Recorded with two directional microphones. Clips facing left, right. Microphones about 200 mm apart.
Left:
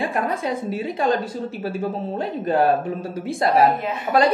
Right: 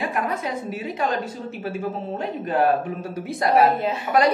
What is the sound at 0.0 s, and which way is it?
A woman's voice, 30° left (ahead or behind).